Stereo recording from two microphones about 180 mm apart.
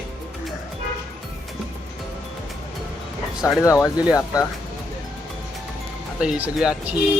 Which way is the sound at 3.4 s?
15° left (ahead or behind).